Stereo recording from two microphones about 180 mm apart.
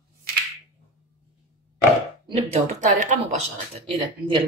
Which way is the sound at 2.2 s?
35° right (ahead or behind).